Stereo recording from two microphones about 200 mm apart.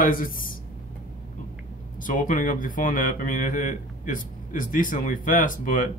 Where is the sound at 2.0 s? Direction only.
40° left (ahead or behind).